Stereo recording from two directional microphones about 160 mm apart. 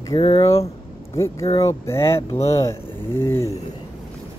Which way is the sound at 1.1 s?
20° left (ahead or behind).